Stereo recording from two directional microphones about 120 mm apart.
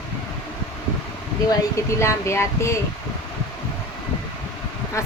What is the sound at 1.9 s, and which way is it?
Speech, 25° left (ahead or behind).